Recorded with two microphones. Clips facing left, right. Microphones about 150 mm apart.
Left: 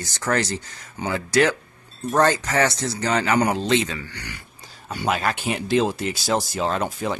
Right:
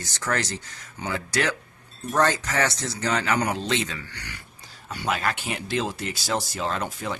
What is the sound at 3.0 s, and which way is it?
Speech, 15° left (ahead or behind).